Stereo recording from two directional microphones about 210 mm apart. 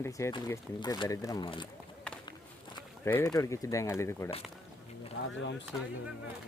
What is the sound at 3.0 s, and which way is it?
Speech, 15° left (ahead or behind).